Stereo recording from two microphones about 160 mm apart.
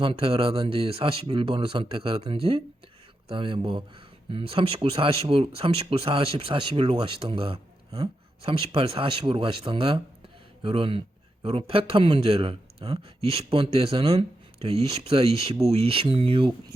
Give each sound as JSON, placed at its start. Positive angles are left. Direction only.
{"t": 0.0, "sound": "speech", "side_deg": -35}